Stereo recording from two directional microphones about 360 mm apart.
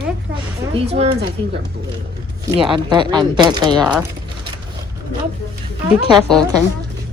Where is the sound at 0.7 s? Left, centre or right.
Centre.